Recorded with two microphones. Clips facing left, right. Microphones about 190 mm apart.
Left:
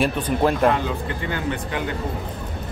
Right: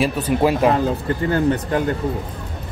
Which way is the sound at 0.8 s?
40° right (ahead or behind).